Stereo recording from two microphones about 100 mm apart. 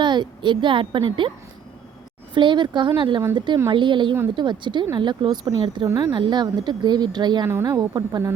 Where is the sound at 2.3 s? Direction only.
50° right (ahead or behind).